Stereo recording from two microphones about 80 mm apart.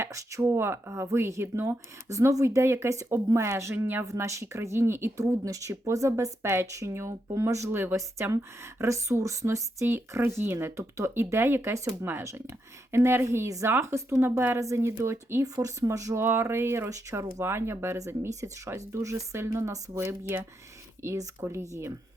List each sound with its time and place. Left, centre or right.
0.0 s speech: right
4.0 s speech: right
5.5 s speech: right
7.7 s speech: right
9.8 s speech: right
15.5 s speech: right
16.2 s speech: right